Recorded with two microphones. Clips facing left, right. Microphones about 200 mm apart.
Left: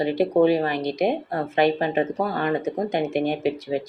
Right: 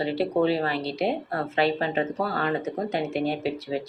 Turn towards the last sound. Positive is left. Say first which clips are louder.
# left 4 dB
turn(degrees=15)  # may be behind; listen again after turning